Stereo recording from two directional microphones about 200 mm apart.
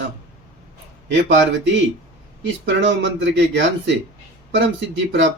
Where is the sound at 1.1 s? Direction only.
65° right (ahead or behind).